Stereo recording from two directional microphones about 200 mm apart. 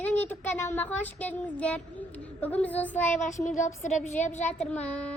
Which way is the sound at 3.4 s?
40° left (ahead or behind).